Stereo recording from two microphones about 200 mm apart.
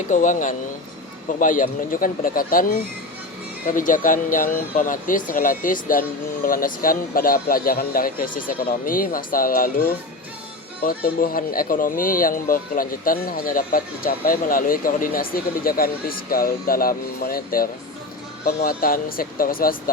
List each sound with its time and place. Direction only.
0.1 s speech: 40° left (ahead or behind)
10.8 s speech: 45° left (ahead or behind)